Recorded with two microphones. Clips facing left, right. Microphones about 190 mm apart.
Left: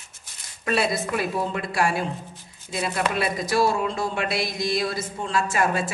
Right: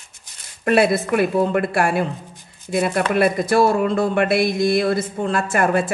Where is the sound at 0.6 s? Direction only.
55° right (ahead or behind).